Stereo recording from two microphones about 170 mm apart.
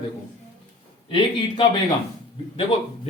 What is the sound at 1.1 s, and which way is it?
Speech, 30° left (ahead or behind).